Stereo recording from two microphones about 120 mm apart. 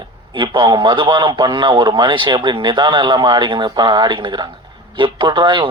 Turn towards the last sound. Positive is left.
turn(degrees=-40)  # may be behind; listen again after turning